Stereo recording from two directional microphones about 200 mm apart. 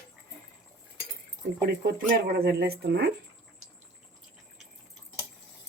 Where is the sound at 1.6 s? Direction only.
50° right (ahead or behind).